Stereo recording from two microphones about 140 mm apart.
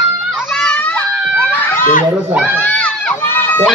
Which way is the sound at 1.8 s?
75° left (ahead or behind).